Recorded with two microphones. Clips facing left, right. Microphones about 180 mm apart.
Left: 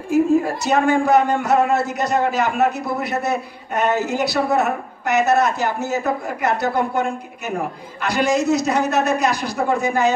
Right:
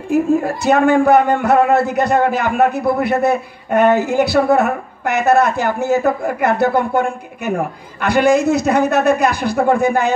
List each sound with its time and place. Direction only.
0.1 s a man's voice: 55° right (ahead or behind)